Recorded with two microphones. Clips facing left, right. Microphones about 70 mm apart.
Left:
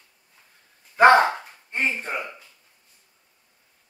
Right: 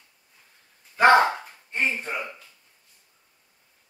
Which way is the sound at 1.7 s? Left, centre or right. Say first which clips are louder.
Left 1 dB; left.